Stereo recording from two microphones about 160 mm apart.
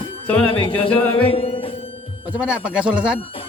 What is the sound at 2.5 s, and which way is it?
Speech, 5° right (ahead or behind).